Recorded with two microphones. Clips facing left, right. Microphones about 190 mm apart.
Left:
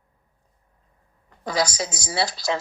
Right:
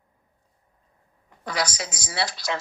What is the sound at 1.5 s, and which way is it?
Speech, 30° left (ahead or behind).